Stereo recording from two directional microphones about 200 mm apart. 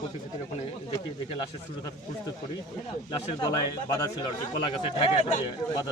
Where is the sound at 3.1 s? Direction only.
20° left (ahead or behind).